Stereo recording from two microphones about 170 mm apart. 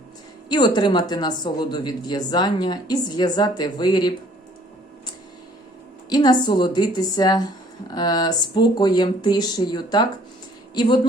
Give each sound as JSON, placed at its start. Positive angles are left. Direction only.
{"t": 0.4, "sound": "speech", "side_deg": 25}
{"t": 6.1, "sound": "speech", "side_deg": 25}